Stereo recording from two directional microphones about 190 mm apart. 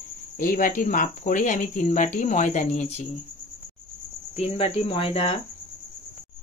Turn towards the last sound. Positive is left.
turn(degrees=30)  # may be behind; listen again after turning